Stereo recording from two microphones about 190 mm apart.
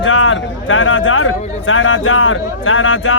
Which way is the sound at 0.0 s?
90° left.